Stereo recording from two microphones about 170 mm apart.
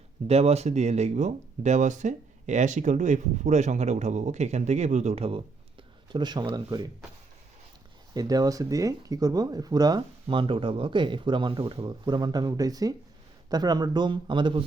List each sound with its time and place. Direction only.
0.3 s speech: 40° right (ahead or behind)
6.1 s speech: 25° right (ahead or behind)
8.1 s speech: 20° right (ahead or behind)